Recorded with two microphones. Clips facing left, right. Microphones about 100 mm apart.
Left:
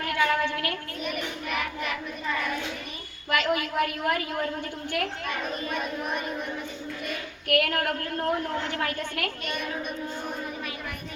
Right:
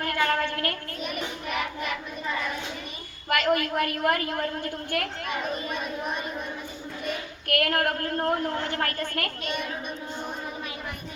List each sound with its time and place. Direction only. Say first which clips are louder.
0.0 s a sound: even; 45° right (ahead or behind)
3.2 s a woman's voice: right 2 dB; 50° right (ahead or behind)
7.4 s a woman's voice: even; 50° right (ahead or behind)